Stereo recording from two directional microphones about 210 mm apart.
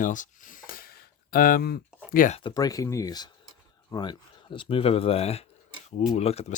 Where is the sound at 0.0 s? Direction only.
40° left (ahead or behind).